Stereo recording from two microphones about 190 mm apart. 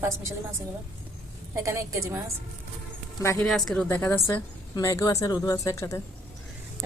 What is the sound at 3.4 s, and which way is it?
A woman's voice, centre (ahead or behind).